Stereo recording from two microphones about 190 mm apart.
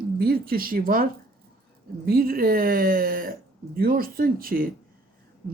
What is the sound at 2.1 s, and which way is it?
Speech, 50° right (ahead or behind).